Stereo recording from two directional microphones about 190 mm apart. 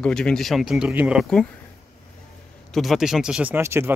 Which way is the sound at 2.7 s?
Centre (ahead or behind).